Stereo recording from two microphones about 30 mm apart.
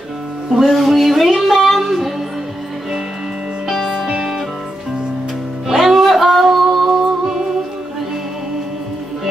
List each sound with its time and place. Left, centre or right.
0.7 s music: centre
3.7 s music: centre
5.7 s music: centre
6.4 s singing: centre
6.9 s music: centre